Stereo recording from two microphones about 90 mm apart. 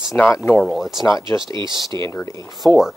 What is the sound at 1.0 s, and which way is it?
Speech, 45° left (ahead or behind).